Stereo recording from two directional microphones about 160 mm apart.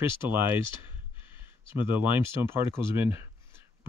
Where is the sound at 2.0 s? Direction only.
15° right (ahead or behind).